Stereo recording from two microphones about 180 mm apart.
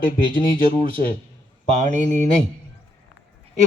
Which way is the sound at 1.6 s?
40° right (ahead or behind).